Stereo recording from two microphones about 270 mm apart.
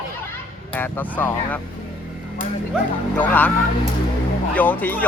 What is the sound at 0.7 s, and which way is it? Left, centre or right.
Speech, centre.